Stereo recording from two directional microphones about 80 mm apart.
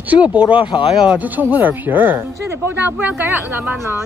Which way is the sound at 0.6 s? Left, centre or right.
Left.